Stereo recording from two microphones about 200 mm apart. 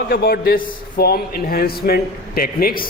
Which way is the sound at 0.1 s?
50° left (ahead or behind).